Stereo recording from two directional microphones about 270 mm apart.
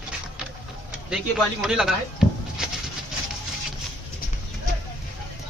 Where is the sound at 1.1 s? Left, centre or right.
Centre.